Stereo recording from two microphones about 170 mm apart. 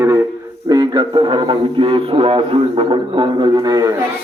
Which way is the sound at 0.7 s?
25° right (ahead or behind).